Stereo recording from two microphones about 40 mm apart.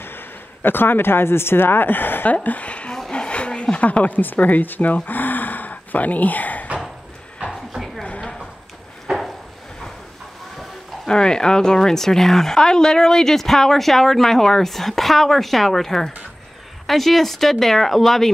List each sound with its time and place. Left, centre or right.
0.0 s speech: left
2.2 s speech: left
3.1 s a sound: left
3.7 s speech: left
4.9 s a sound: left
11.1 s speech: centre